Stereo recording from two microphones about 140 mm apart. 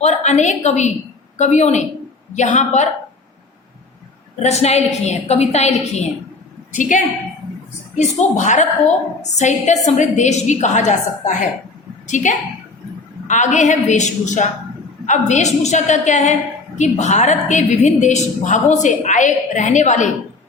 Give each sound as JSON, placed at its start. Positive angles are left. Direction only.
{"t": 0.0, "sound": "a woman's voice", "side_deg": 55}
{"t": 4.4, "sound": "a woman's voice", "side_deg": 50}
{"t": 6.7, "sound": "a woman's voice", "side_deg": 65}